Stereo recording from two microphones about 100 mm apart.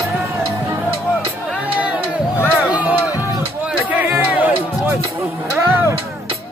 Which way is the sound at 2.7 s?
15° right (ahead or behind).